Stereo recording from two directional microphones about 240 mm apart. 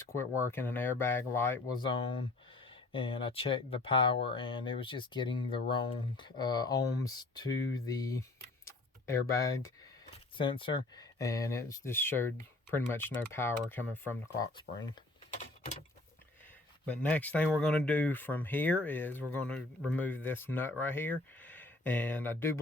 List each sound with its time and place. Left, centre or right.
0.0 s speech: centre
8.6 s tick-tock: centre
10.3 s speech: left
16.8 s speech: centre